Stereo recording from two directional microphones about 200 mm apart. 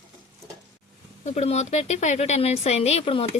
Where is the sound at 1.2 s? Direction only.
35° left (ahead or behind).